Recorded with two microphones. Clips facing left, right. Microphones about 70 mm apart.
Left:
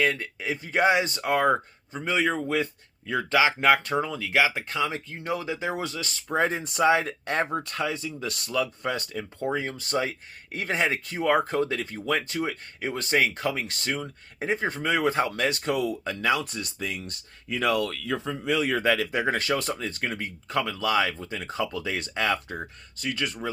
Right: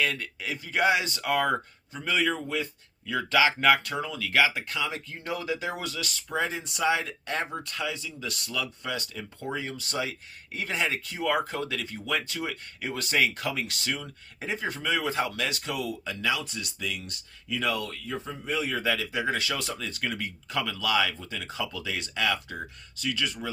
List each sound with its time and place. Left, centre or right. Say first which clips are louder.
0.0 s speech: left 4 dB; left
17.6 s speech: left 6 dB; left
19.2 s speech: left 4 dB; left
19.7 s speech: left 2 dB; left